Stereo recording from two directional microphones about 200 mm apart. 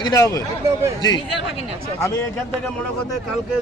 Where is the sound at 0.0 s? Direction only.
15° left (ahead or behind).